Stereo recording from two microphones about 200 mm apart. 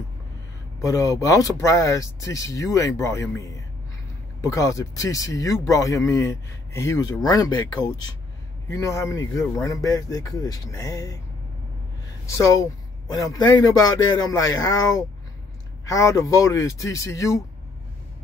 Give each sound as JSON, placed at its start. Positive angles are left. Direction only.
{"t": 0.7, "sound": "speech", "side_deg": 15}
{"t": 12.3, "sound": "speech", "side_deg": 15}